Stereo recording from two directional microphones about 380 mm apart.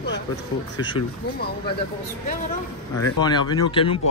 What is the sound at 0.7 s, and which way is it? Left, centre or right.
Speech, centre.